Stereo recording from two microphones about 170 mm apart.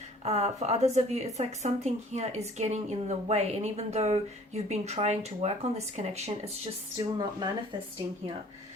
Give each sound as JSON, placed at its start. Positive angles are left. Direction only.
{"t": 0.3, "sound": "speech", "side_deg": -40}
{"t": 6.9, "sound": "speech", "side_deg": -25}